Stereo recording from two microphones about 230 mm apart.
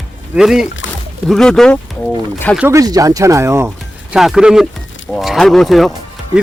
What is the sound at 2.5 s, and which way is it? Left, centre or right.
Speech, centre.